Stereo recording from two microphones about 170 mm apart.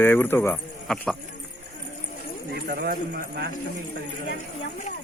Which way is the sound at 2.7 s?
65° right (ahead or behind).